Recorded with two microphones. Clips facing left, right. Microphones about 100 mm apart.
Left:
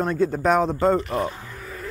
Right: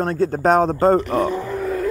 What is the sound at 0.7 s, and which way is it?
Speech, 45° right (ahead or behind).